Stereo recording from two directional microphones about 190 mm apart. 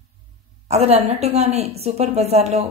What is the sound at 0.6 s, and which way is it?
A woman's voice, 35° right (ahead or behind).